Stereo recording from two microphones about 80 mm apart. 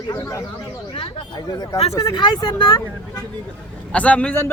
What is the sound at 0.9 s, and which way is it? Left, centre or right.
Speech, left.